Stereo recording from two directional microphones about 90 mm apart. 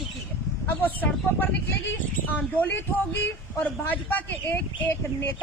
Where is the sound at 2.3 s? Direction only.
20° left (ahead or behind).